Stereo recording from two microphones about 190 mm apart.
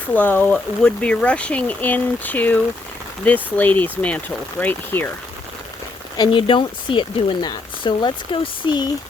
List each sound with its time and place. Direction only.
0.1 s speech: 10° left (ahead or behind)
6.1 s speech: 25° left (ahead or behind)